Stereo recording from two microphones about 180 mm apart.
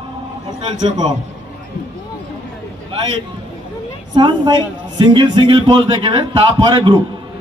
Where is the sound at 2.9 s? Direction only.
30° right (ahead or behind).